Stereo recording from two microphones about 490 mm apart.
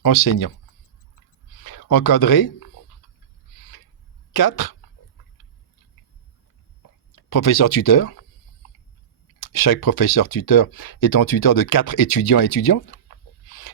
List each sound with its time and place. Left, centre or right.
0.0 s speech: left
1.7 s speech: left
4.4 s speech: left
7.3 s speech: left
9.4 s speech: left